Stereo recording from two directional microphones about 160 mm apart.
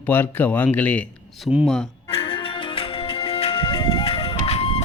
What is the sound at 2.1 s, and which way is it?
Music, 35° left (ahead or behind).